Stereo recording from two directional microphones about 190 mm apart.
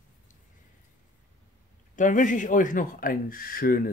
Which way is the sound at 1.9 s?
40° left (ahead or behind).